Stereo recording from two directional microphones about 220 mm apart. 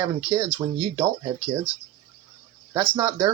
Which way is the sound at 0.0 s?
10° right (ahead or behind).